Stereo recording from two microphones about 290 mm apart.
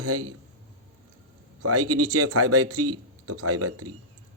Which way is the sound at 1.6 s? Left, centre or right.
Right.